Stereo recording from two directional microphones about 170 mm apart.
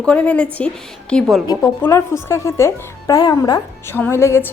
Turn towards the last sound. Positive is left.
turn(degrees=15)  # may be behind; listen again after turning